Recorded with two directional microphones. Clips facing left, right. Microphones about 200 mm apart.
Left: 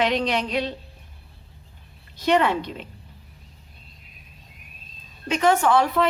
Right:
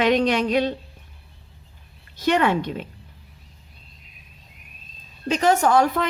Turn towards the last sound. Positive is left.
turn(degrees=-45)  # may be behind; listen again after turning